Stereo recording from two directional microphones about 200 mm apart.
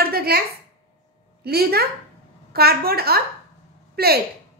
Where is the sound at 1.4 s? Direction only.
50° right (ahead or behind).